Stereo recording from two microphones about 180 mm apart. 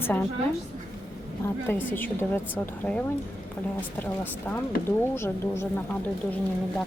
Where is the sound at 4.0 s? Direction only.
10° left (ahead or behind).